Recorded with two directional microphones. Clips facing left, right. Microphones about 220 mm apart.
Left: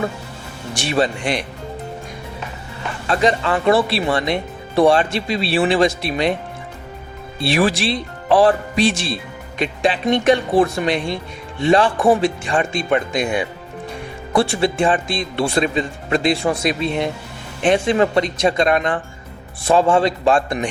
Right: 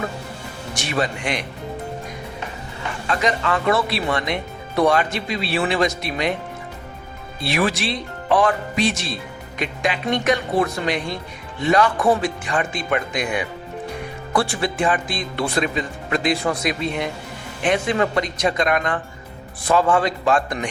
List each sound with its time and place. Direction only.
0.7 s speech: 30° left (ahead or behind)
3.1 s speech: 30° left (ahead or behind)
7.4 s speech: 30° left (ahead or behind)